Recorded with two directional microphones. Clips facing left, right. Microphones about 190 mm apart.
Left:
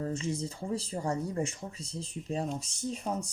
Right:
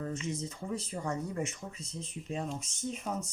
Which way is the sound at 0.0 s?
30° left (ahead or behind).